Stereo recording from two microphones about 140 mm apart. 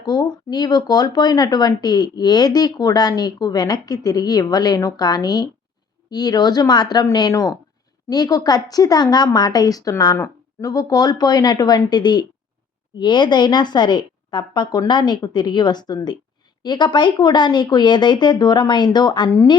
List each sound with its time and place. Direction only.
0.0 s a woman's voice: 30° left (ahead or behind)